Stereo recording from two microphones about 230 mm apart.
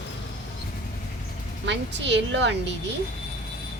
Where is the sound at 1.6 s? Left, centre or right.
Right.